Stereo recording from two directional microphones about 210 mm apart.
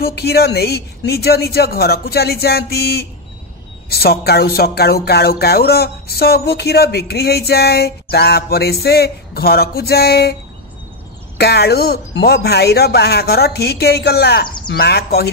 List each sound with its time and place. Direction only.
0.0 s speech: 50° left (ahead or behind)
11.3 s speech: 50° left (ahead or behind)